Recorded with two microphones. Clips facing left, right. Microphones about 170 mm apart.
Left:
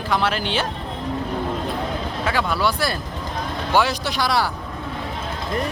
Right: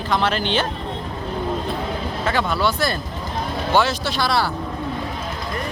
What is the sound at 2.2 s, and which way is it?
Speech, 10° left (ahead or behind).